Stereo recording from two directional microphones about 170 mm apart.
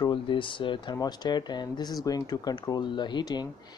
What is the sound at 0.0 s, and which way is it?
Speech, 30° left (ahead or behind).